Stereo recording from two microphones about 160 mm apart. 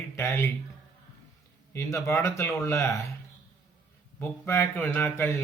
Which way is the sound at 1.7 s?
20° left (ahead or behind).